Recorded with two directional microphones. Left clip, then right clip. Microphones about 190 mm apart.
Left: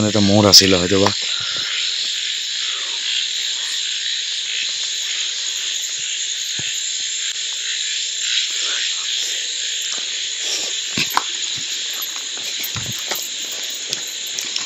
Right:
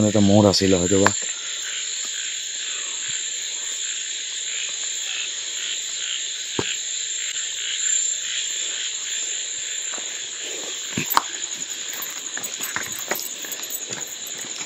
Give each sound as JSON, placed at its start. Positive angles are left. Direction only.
{"t": 0.0, "sound": "speech", "side_deg": 10}